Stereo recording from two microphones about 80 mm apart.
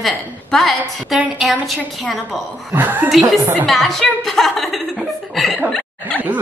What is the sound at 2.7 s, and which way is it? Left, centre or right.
Speech, right.